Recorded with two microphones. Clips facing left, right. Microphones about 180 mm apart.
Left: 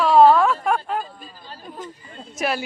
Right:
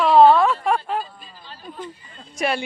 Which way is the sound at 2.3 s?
Centre (ahead or behind).